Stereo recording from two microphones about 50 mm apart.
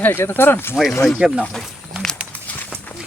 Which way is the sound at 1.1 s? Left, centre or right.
Centre.